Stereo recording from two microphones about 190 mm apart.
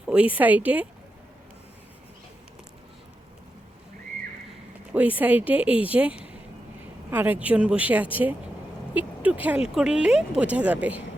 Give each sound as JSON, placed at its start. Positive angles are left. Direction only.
{"t": 0.0, "sound": "speech", "side_deg": -5}
{"t": 4.9, "sound": "speech", "side_deg": -10}